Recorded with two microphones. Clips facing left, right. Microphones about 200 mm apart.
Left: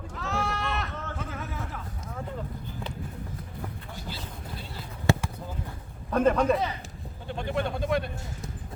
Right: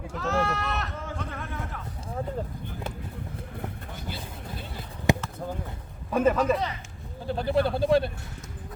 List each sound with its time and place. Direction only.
0.1 s sheep: centre (ahead or behind)
5.1 s basketball bounce: 15° right (ahead or behind)
6.1 s a man's voice: 5° right (ahead or behind)
7.3 s speech: 35° right (ahead or behind)